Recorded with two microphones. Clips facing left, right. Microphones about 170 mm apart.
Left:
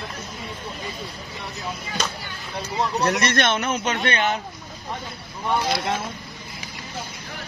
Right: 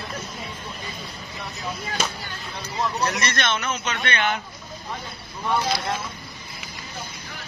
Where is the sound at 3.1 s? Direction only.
60° left (ahead or behind).